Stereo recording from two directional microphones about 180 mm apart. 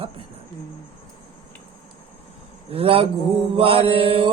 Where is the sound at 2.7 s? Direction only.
30° right (ahead or behind).